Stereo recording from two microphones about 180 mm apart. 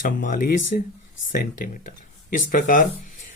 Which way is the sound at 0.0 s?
50° left (ahead or behind).